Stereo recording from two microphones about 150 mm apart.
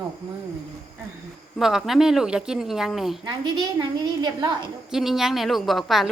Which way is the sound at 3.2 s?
30° right (ahead or behind).